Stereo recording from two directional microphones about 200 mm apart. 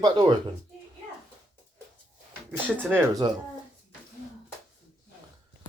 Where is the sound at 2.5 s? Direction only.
10° right (ahead or behind).